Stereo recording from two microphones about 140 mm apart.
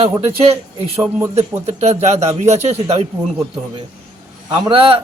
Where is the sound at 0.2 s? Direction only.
45° right (ahead or behind).